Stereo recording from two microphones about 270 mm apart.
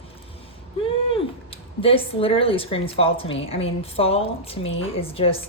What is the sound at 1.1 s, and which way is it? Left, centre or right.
A woman's voice, centre.